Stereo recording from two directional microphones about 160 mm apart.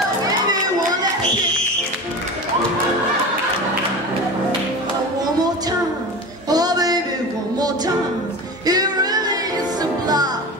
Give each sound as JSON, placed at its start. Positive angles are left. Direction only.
{"t": 6.5, "sound": "music", "side_deg": -25}
{"t": 8.6, "sound": "music", "side_deg": -25}